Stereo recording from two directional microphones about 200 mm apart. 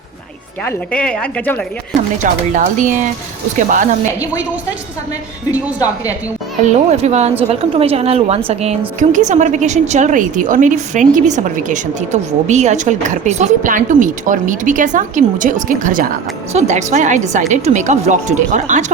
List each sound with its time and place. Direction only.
0.6 s speech: 10° left (ahead or behind)
2.1 s a woman's voice: 40° right (ahead or behind)
5.5 s speech: 10° right (ahead or behind)
6.9 s a woman's voice: 30° right (ahead or behind)